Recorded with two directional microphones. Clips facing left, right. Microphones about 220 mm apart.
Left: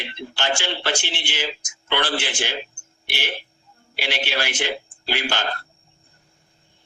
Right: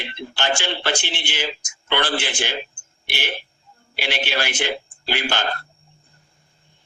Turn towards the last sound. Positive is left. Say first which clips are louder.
# right 1 dB
turn(degrees=-55)  # may be behind; listen again after turning